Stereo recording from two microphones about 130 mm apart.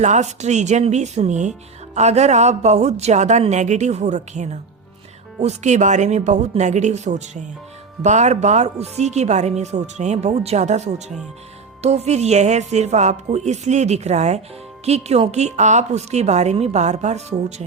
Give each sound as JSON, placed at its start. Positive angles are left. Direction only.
{"t": 0.0, "sound": "speech", "side_deg": -65}